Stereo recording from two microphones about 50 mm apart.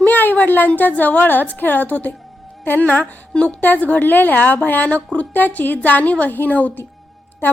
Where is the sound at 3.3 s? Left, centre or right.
Left.